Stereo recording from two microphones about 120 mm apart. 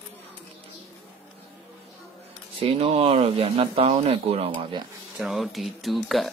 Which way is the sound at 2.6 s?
60° right (ahead or behind).